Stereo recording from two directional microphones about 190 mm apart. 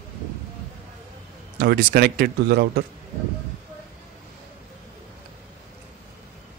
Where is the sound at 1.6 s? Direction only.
55° right (ahead or behind).